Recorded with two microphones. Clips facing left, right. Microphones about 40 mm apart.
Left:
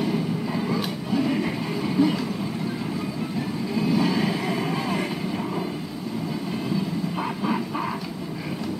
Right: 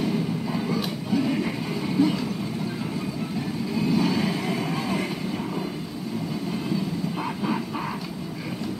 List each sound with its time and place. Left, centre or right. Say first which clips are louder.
0.0 s music: left 1 dB; centre
3.7 s vehicle: left 1 dB; centre